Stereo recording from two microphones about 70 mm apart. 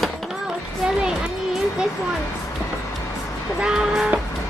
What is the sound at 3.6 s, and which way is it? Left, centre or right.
Music, centre.